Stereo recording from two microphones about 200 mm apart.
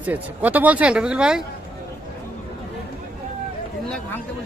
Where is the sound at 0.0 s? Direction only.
10° right (ahead or behind).